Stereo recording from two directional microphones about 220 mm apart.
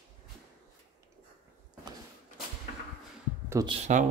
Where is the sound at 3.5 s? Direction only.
20° right (ahead or behind).